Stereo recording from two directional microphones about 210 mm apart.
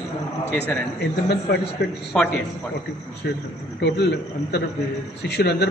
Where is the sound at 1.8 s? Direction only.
50° left (ahead or behind).